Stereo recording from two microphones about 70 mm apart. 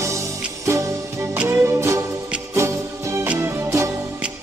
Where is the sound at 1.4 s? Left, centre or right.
Right.